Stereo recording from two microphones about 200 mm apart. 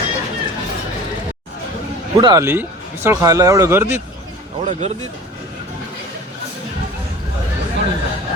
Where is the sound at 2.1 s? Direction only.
20° right (ahead or behind).